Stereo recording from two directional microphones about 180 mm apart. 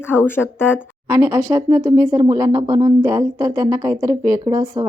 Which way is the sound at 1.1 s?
15° right (ahead or behind).